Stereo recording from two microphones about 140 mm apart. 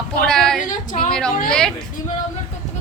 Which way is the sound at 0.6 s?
65° left (ahead or behind).